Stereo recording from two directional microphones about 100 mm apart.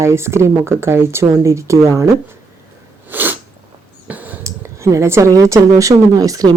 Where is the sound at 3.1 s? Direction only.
20° right (ahead or behind).